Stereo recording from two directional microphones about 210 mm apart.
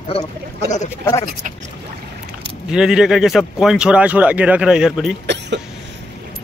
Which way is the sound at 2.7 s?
5° right (ahead or behind).